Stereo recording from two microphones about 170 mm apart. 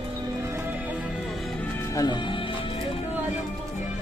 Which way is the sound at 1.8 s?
20° left (ahead or behind).